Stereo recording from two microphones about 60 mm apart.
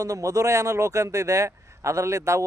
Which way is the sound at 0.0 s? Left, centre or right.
Right.